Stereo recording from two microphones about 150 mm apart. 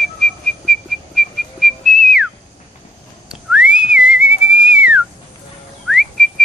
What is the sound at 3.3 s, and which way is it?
Whistling, 5° right (ahead or behind).